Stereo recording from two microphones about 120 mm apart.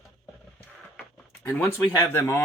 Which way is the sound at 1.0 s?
15° left (ahead or behind).